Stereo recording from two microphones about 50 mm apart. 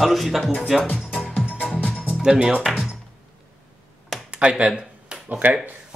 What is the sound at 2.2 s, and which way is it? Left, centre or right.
Speech, right.